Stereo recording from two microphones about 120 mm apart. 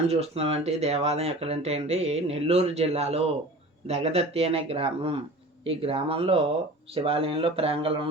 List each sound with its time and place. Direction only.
0.1 s speech: 60° right (ahead or behind)